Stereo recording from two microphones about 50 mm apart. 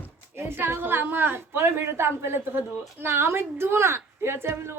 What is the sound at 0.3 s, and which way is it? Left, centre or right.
A woman's voice, right.